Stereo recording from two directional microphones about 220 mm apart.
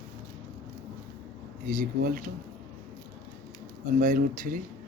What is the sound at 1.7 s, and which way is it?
Speech, 40° right (ahead or behind).